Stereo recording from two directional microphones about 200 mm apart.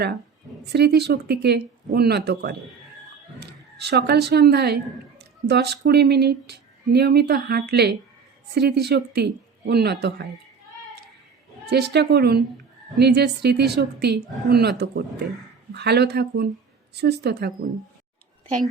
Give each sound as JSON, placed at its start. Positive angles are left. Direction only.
{"t": 0.6, "sound": "a woman's voice", "side_deg": -55}
{"t": 11.6, "sound": "a woman's voice", "side_deg": -55}